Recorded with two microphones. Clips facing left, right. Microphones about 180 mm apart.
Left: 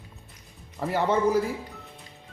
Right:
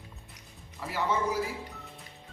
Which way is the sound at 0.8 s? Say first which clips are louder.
Left 7 dB; 60° left (ahead or behind).